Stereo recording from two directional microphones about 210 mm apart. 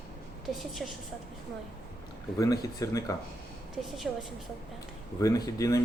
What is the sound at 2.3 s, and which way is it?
Speech, 15° left (ahead or behind).